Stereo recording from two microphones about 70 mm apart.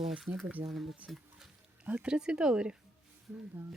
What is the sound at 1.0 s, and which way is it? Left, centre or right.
Speech, right.